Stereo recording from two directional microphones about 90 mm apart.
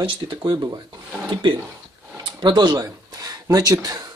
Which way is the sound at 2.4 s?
55° right (ahead or behind).